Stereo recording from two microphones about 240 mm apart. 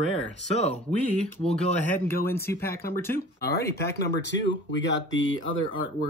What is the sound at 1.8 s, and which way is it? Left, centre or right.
Speech, centre.